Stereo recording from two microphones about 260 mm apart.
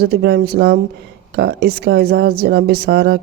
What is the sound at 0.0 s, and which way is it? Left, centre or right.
Speech, right.